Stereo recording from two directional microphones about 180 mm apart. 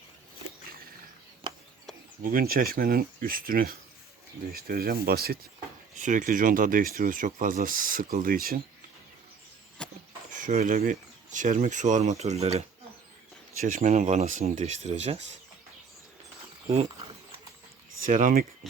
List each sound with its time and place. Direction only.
2.2 s speech: 55° right (ahead or behind)
6.0 s speech: 45° right (ahead or behind)
9.8 s a sound: 5° left (ahead or behind)
10.3 s speech: 45° right (ahead or behind)
18.0 s speech: 50° right (ahead or behind)
18.6 s speech: centre (ahead or behind)